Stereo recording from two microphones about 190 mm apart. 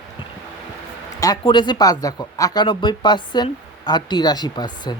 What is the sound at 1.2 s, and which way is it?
Speech, 20° left (ahead or behind).